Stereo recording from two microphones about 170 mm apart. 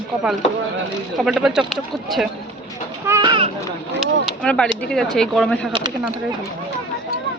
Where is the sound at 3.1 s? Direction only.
25° right (ahead or behind).